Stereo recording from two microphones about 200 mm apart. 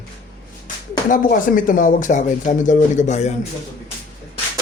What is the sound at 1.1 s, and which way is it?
Speech, 45° left (ahead or behind).